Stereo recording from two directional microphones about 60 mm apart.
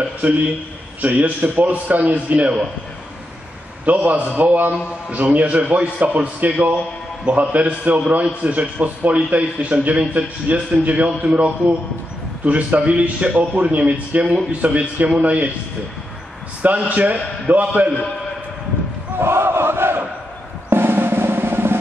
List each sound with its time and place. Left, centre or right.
1.0 s a man's voice: right
3.8 s a man's voice: right
16.6 s a man's voice: right
19.1 s crowd: right
20.7 s drum: right